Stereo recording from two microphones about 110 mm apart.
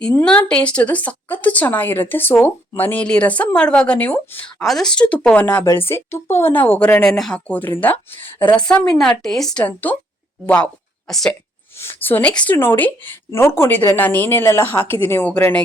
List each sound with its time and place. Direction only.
0.1 s speech: 15° left (ahead or behind)
4.6 s a woman's voice: 5° left (ahead or behind)
9.6 s a woman's voice: 15° left (ahead or behind)
11.8 s speech: 20° left (ahead or behind)